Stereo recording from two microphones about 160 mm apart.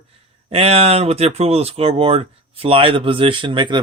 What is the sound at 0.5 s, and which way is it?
Speech, 40° right (ahead or behind).